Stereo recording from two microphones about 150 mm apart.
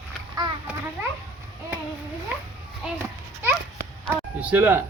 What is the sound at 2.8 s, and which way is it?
Speech, 5° right (ahead or behind).